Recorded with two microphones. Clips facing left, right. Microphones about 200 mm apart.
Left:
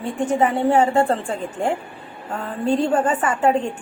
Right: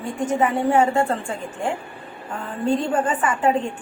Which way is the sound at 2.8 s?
35° left (ahead or behind).